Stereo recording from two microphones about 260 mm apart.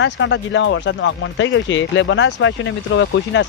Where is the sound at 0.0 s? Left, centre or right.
Left.